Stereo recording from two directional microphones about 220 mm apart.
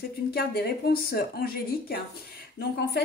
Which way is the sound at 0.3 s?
45° left (ahead or behind).